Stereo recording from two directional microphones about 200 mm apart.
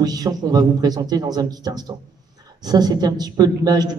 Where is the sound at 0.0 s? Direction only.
20° right (ahead or behind).